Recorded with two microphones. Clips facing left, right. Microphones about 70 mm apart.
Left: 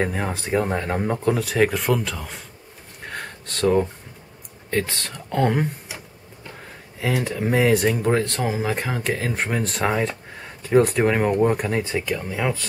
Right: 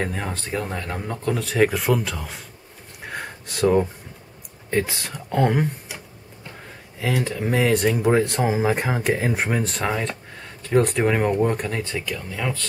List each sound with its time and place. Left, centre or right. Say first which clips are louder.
0.0 s speech: left 3 dB; centre; by 1.2 s left
1.2 s speech: right 1 dB; centre
3.0 s a sound: right 1 dB; centre
4.6 s speech: right 1 dB; centre
7.0 s speech: even; centre